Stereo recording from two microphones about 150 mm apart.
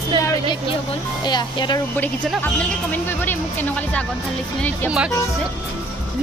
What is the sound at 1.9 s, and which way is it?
Speech, 10° left (ahead or behind).